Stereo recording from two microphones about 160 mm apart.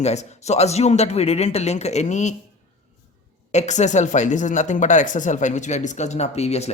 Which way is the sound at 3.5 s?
45° left (ahead or behind).